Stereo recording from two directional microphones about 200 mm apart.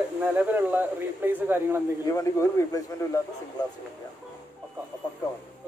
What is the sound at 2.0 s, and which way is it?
Speech, 15° left (ahead or behind).